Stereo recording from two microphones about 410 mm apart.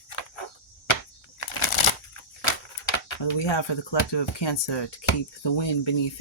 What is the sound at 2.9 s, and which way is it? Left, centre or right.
Speech, left.